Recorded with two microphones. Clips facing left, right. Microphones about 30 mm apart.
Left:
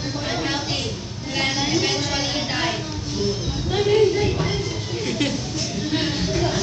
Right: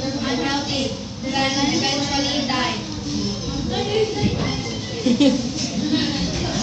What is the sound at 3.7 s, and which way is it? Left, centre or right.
Music, centre.